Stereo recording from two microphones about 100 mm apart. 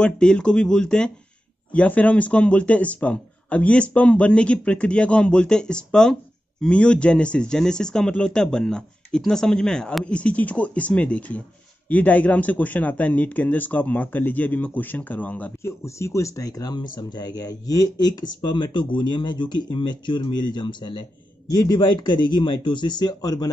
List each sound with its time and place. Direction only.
0.0 s speech: 10° left (ahead or behind)
15.6 s speech: 30° left (ahead or behind)